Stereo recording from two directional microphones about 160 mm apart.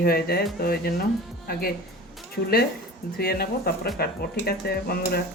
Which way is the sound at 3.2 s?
75° left (ahead or behind).